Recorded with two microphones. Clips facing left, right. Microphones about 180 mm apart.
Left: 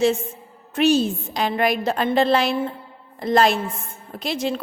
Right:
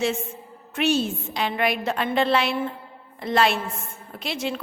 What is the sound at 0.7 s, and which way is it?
A woman's voice, 35° left (ahead or behind).